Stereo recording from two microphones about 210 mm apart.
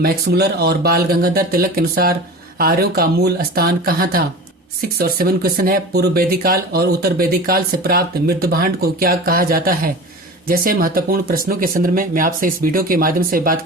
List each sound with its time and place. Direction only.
0.0 s speech: 50° right (ahead or behind)